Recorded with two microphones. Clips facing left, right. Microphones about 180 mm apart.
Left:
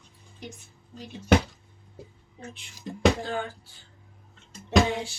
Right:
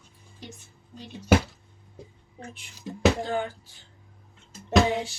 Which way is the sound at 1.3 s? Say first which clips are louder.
Even; 5° right (ahead or behind).